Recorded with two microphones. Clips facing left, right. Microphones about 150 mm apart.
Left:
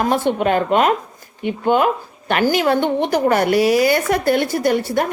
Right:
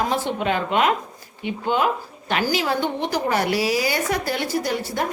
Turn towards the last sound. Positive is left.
turn(degrees=55)  # may be behind; listen again after turning